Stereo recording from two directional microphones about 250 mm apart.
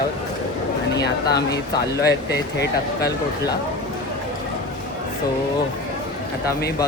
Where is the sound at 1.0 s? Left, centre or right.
Left.